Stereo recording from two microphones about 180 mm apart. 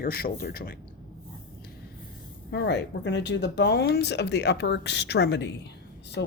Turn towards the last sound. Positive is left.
turn(degrees=85)